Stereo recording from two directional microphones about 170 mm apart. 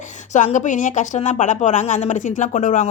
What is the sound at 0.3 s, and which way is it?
Speech, 50° left (ahead or behind).